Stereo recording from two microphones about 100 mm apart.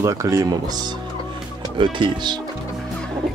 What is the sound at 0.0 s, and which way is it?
Speech, 30° right (ahead or behind).